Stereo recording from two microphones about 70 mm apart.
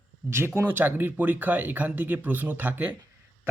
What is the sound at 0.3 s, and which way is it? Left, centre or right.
A man's voice, right.